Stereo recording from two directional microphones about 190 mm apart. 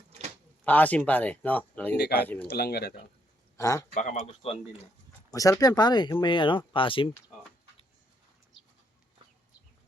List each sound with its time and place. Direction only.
0.6 s speech: 10° left (ahead or behind)
2.0 s speech: 60° left (ahead or behind)
3.6 s speech: 15° left (ahead or behind)
3.9 s speech: 40° left (ahead or behind)
5.3 s speech: 15° left (ahead or behind)